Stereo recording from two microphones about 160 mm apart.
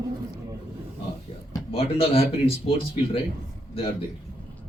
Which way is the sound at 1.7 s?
35° left (ahead or behind).